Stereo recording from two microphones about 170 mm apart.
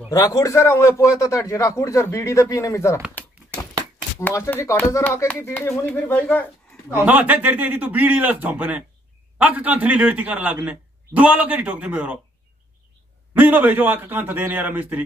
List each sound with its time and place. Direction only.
0.1 s speech: 20° left (ahead or behind)
4.2 s speech: 15° left (ahead or behind)
6.9 s a man's voice: 10° right (ahead or behind)
13.3 s a man's voice: 10° right (ahead or behind)